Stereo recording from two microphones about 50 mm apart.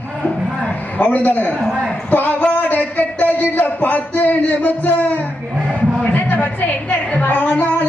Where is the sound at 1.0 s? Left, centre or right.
Left.